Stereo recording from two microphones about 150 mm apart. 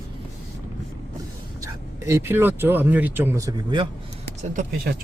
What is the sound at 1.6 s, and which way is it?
Speech, 20° right (ahead or behind).